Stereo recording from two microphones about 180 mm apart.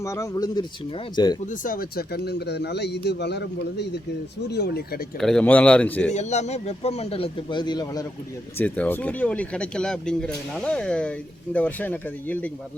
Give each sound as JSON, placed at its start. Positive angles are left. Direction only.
{"t": 0.0, "sound": "speech", "side_deg": 15}
{"t": 1.5, "sound": "speech", "side_deg": 50}
{"t": 5.2, "sound": "speech", "side_deg": 5}
{"t": 6.1, "sound": "speech", "side_deg": 40}
{"t": 8.5, "sound": "speech", "side_deg": 10}